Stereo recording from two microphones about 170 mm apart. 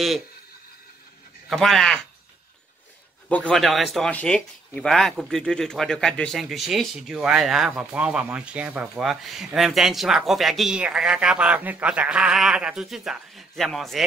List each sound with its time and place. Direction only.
1.5 s speech: centre (ahead or behind)
3.3 s speech: 5° left (ahead or behind)